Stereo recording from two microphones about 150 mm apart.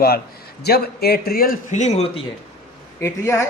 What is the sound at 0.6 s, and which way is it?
Speech, 90° left.